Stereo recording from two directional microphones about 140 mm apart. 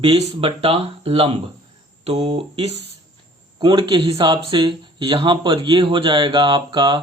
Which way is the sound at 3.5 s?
35° right (ahead or behind).